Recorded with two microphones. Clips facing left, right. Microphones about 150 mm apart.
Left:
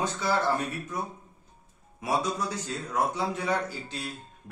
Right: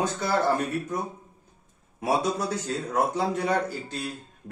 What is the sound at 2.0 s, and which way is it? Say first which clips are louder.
A man's voice: right 3 dB; 55° right (ahead or behind).